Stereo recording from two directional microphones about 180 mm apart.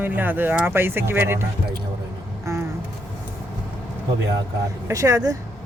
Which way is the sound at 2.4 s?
15° right (ahead or behind).